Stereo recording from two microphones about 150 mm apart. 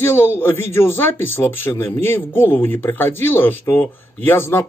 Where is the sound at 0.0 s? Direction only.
15° left (ahead or behind).